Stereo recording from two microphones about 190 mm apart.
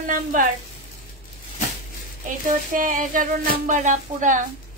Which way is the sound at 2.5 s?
45° right (ahead or behind).